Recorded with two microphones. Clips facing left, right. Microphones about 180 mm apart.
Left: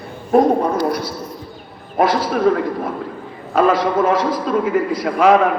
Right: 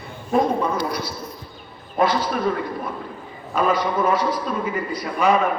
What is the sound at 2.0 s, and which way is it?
A man's voice, 90° left.